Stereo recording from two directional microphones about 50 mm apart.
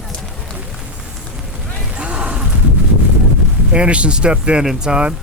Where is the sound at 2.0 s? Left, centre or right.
Right.